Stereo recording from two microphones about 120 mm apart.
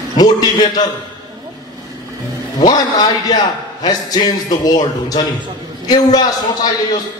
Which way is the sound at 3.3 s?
30° left (ahead or behind).